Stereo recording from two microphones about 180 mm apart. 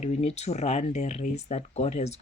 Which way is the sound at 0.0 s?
40° left (ahead or behind).